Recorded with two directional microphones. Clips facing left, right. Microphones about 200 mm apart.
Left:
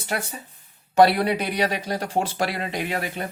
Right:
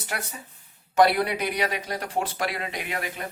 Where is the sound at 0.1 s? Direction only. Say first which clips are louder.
Left 6 dB; 30° left (ahead or behind).